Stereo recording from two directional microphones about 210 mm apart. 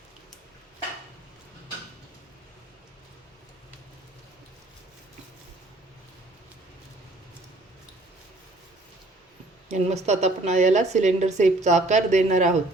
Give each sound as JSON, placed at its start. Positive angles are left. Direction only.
{"t": 9.6, "sound": "a woman's voice", "side_deg": -30}